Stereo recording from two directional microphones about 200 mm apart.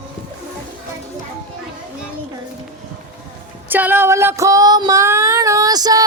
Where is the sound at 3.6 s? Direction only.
10° right (ahead or behind).